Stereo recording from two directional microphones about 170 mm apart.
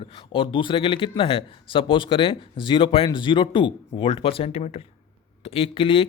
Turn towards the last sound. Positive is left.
turn(degrees=30)  # may be behind; listen again after turning